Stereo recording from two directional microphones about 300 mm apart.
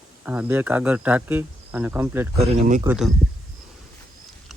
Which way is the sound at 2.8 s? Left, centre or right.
Centre.